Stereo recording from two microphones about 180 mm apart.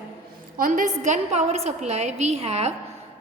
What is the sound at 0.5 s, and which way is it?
A woman's voice, 50° right (ahead or behind).